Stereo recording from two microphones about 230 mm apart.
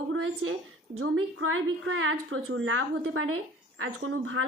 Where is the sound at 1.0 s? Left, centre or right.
Right.